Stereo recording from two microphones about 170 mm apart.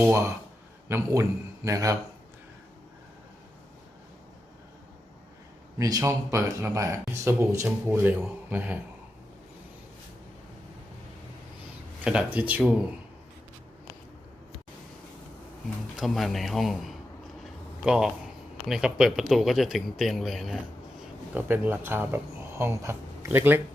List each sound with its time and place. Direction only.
0.0 s a man's voice: 15° right (ahead or behind)
5.8 s speech: 20° right (ahead or behind)
12.0 s speech: 5° right (ahead or behind)
16.0 s a man's voice: centre (ahead or behind)
21.3 s speech: 10° right (ahead or behind)